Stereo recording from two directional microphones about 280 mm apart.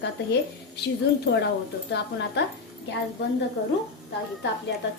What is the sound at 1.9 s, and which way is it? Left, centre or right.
Speech, left.